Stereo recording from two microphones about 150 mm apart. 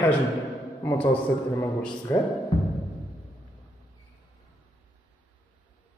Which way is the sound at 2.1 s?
15° left (ahead or behind).